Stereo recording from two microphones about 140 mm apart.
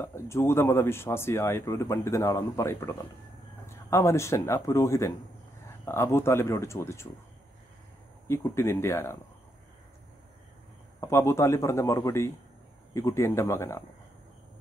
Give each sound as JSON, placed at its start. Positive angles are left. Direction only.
{"t": 0.0, "sound": "speech", "side_deg": 20}
{"t": 8.3, "sound": "speech", "side_deg": 20}
{"t": 11.0, "sound": "speech", "side_deg": 20}